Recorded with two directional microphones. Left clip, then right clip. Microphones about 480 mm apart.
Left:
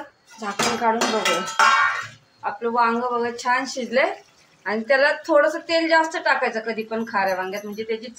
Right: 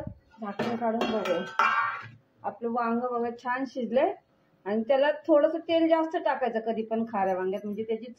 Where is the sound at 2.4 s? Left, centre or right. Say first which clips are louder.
Left 9 dB; right.